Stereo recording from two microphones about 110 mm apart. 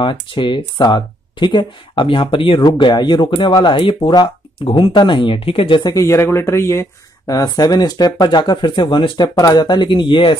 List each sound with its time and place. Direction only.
0.0 s speech: 50° left (ahead or behind)
2.6 s speech: 40° left (ahead or behind)
5.9 s speech: 30° left (ahead or behind); by 9.3 s 50° left (ahead or behind)
9.4 s speech: 35° left (ahead or behind)